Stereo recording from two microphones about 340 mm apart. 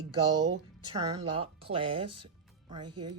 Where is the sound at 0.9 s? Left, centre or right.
Centre.